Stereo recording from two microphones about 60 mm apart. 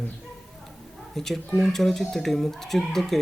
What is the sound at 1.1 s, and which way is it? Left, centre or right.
Speech, centre.